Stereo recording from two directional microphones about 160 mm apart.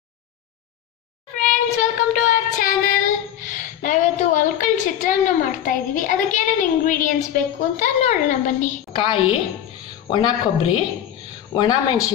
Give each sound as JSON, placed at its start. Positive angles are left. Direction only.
{"t": 1.4, "sound": "child singing", "side_deg": 50}
{"t": 8.9, "sound": "a woman's voice", "side_deg": 35}